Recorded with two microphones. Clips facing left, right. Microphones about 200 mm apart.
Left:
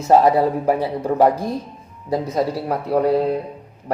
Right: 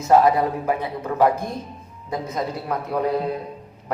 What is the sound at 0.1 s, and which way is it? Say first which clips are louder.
A man's voice: left 2 dB; 35° left (ahead or behind).